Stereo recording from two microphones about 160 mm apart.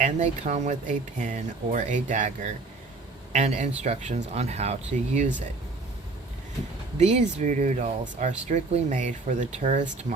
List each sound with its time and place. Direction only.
0.0 s speech: 45° right (ahead or behind)
7.0 s speech: 45° right (ahead or behind)